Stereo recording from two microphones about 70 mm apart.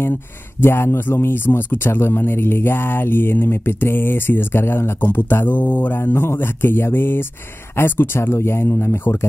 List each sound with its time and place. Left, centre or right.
0.6 s speech: left